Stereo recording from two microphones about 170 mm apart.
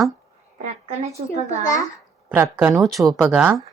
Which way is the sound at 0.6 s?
40° right (ahead or behind).